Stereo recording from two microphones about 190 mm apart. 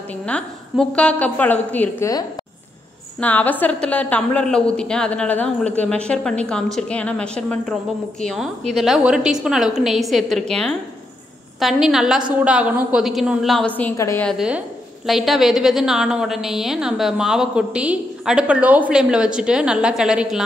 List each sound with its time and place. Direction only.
0.1 s a woman's voice: 5° left (ahead or behind)
14.2 s a woman's voice: 5° right (ahead or behind)